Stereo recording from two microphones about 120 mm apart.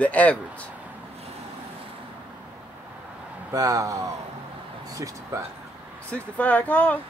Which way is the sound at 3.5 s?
30° right (ahead or behind).